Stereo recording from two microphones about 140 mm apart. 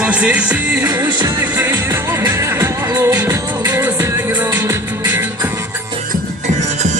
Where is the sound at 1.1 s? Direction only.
30° right (ahead or behind).